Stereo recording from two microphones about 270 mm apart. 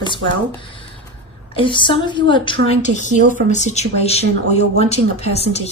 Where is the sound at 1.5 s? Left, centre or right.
Centre.